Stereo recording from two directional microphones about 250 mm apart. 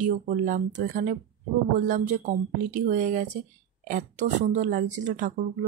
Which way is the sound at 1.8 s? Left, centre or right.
Right.